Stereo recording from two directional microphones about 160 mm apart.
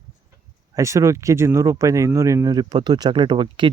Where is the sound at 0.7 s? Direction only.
20° right (ahead or behind).